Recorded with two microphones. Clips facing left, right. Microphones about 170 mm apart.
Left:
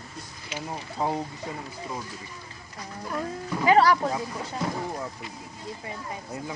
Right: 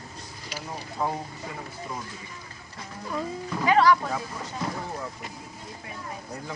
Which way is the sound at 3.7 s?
35° left (ahead or behind).